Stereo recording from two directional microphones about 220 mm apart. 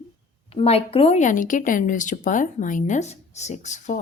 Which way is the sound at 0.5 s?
25° left (ahead or behind).